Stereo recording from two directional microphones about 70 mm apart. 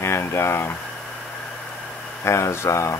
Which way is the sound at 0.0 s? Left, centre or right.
Left.